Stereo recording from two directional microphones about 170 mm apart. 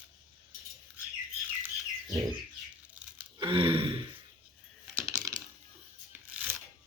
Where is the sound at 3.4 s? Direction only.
30° right (ahead or behind).